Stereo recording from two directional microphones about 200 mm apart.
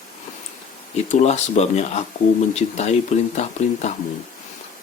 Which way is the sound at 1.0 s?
35° left (ahead or behind).